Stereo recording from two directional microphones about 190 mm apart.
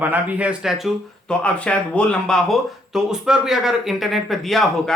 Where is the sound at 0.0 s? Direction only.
10° right (ahead or behind).